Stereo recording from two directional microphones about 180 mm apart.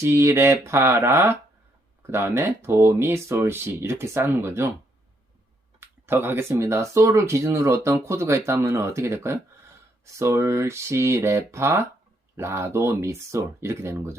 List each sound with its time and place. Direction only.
0.0 s speech: 15° right (ahead or behind)
5.8 s speech: 10° right (ahead or behind)